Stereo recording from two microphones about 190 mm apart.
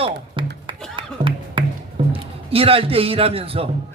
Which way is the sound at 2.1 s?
30° right (ahead or behind).